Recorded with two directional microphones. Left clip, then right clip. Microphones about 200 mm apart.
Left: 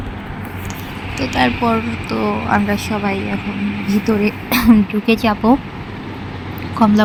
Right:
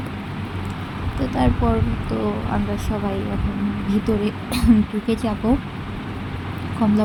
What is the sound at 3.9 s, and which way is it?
Speech, 10° left (ahead or behind).